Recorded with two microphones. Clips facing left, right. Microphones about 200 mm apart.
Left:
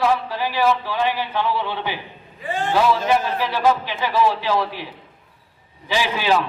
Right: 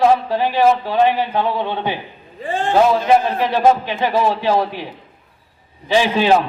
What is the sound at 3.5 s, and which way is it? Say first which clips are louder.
Mantra: right 5 dB; 45° right (ahead or behind).